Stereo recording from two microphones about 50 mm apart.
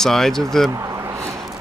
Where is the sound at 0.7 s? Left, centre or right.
Right.